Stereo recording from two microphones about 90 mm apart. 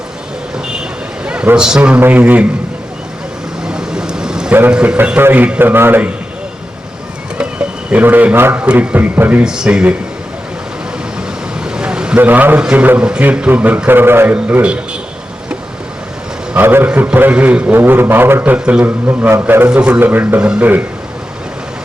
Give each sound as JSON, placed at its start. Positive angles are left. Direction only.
{"t": 0.5, "sound": "a sound", "side_deg": -10}
{"t": 1.5, "sound": "a man's voice", "side_deg": -10}
{"t": 3.6, "sound": "vehicle", "side_deg": -10}
{"t": 4.7, "sound": "a man's voice", "side_deg": -10}
{"t": 7.9, "sound": "a man's voice", "side_deg": -20}
{"t": 9.4, "sound": "a man's voice", "side_deg": -10}
{"t": 11.6, "sound": "a sound", "side_deg": -10}
{"t": 12.6, "sound": "a man's voice", "side_deg": -15}
{"t": 14.3, "sound": "a man's voice", "side_deg": -15}
{"t": 16.6, "sound": "a man's voice", "side_deg": -25}
{"t": 19.6, "sound": "a man's voice", "side_deg": -15}